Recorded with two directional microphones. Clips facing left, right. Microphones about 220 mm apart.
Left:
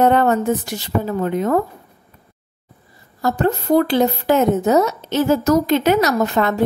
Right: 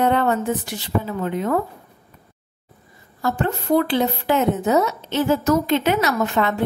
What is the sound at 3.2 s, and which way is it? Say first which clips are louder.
A woman's voice: left 4 dB; 40° left (ahead or behind).